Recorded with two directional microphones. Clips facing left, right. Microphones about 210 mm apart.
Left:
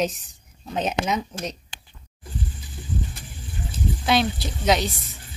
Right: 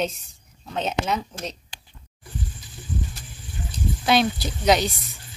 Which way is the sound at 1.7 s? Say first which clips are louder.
Left 1 dB; 35° right (ahead or behind).